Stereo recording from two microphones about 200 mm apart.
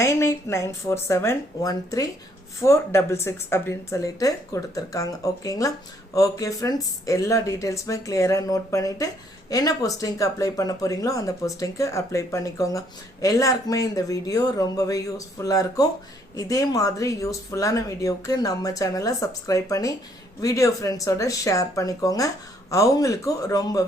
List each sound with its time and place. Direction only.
0.0 s speech: 15° left (ahead or behind)